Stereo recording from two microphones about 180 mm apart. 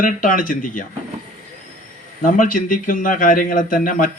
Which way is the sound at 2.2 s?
50° left (ahead or behind).